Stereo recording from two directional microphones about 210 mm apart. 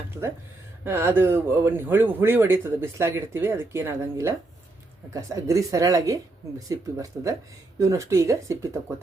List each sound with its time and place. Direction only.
0.9 s speech: 10° right (ahead or behind)